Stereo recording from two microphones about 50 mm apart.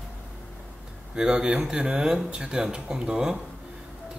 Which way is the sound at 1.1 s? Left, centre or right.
Centre.